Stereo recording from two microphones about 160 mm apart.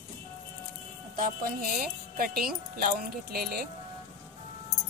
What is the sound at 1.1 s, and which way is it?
Speech, 60° right (ahead or behind).